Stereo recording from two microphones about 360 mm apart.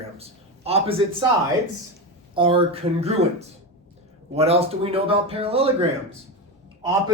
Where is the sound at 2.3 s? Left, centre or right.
Centre.